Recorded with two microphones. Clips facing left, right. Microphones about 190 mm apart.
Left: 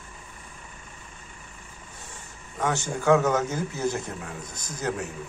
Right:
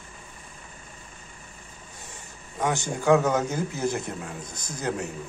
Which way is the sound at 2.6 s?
15° right (ahead or behind).